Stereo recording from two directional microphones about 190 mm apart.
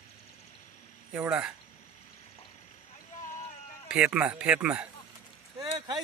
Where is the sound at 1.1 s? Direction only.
5° right (ahead or behind).